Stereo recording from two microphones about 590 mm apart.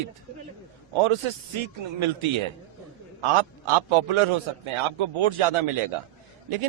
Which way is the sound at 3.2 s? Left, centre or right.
Right.